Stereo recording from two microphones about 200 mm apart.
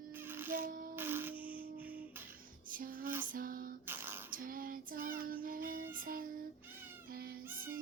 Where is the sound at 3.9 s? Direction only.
10° right (ahead or behind).